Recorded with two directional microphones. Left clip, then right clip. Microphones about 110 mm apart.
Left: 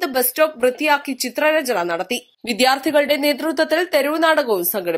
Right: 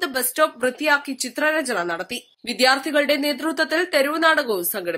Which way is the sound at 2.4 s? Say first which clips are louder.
Left 1 dB; 55° left (ahead or behind).